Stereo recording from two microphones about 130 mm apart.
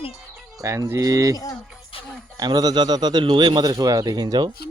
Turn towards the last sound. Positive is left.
turn(degrees=-30)  # may be behind; listen again after turning